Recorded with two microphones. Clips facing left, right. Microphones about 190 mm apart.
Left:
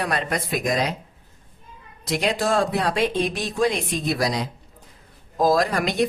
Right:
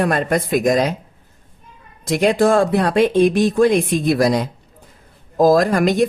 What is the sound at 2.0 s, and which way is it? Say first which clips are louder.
Speech: right 8 dB; 50° right (ahead or behind).